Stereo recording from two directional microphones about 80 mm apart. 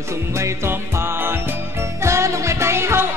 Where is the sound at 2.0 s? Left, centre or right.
Right.